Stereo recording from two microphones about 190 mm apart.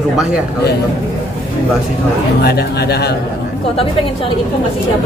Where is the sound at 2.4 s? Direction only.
60° left (ahead or behind).